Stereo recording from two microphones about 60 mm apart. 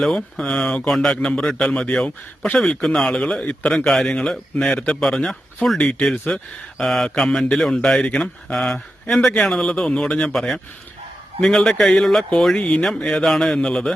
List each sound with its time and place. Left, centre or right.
0.0 s a man's voice: centre
1.1 s speech: left
1.4 s a man's voice: centre
5.7 s a man's voice: centre
8.0 s speech: centre
8.5 s a man's voice: centre
10.3 s a man's voice: centre
12.5 s a man's voice: centre
13.6 s a man's voice: centre